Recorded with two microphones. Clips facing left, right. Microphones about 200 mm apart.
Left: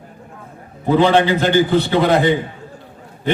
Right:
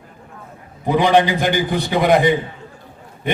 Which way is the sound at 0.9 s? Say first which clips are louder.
Left 1 dB; 15° right (ahead or behind).